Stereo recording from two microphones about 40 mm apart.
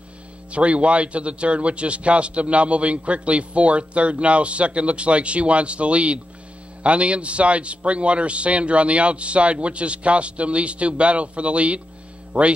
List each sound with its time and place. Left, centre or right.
0.5 s a man's voice: right